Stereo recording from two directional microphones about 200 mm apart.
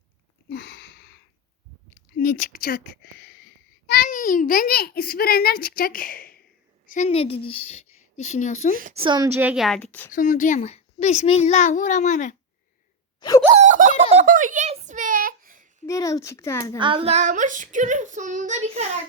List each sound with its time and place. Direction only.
0.5 s a sound: 60° left (ahead or behind)
2.1 s a child's voice: 45° left (ahead or behind)
8.7 s a woman's voice: 40° right (ahead or behind)
9.0 s a woman's voice: 20° right (ahead or behind); by 10.1 s 10° left (ahead or behind)
10.1 s a child's voice: 40° left (ahead or behind)
13.1 s wail: 20° left (ahead or behind)
13.6 s a sound: 40° right (ahead or behind)
15.9 s speech: 15° left (ahead or behind)
16.7 s child singing: 25° right (ahead or behind)